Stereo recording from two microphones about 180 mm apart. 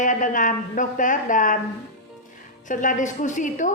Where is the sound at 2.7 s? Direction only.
45° left (ahead or behind).